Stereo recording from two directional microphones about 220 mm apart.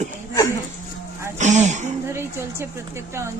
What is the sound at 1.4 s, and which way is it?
Speech, 30° right (ahead or behind).